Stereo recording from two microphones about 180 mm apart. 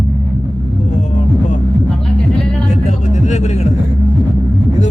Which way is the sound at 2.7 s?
40° left (ahead or behind).